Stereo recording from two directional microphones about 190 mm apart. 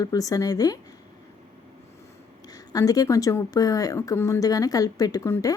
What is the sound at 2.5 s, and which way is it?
Speech, 20° left (ahead or behind).